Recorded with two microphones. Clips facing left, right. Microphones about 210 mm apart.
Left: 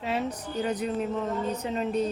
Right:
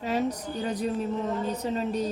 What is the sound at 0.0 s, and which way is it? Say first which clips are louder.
A man's voice: right 2 dB; 40° right (ahead or behind).